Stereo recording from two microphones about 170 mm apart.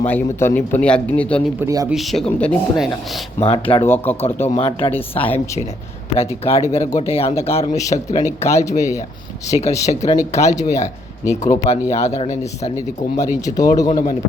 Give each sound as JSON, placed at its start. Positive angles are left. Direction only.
{"t": 0.0, "sound": "speech", "side_deg": 10}
{"t": 1.5, "sound": "speech", "side_deg": -20}
{"t": 1.9, "sound": "speech", "side_deg": 0}
{"t": 3.4, "sound": "speech", "side_deg": 30}
{"t": 3.8, "sound": "speech", "side_deg": 10}
{"t": 4.4, "sound": "speech", "side_deg": 35}
{"t": 11.3, "sound": "speech", "side_deg": 20}
{"t": 11.7, "sound": "speech", "side_deg": 40}